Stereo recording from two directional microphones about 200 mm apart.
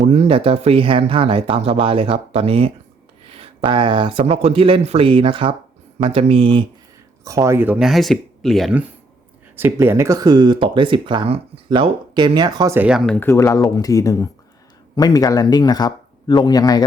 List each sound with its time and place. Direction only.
0.0 s speech: 35° right (ahead or behind)
7.3 s speech: 15° right (ahead or behind)
13.1 s speech: 15° left (ahead or behind)